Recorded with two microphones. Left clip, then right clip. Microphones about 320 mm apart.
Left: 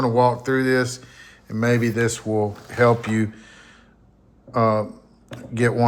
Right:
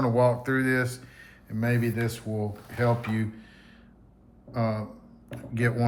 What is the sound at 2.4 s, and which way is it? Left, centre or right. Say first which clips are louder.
Speech: left 10 dB; left.